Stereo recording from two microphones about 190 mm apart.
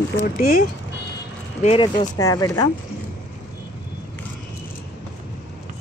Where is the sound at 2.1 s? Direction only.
20° left (ahead or behind).